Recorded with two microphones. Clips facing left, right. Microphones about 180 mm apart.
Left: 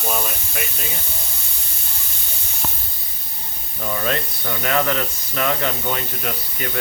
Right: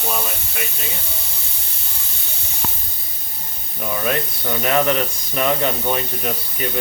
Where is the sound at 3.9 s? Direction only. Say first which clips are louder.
Right 1 dB; 10° right (ahead or behind).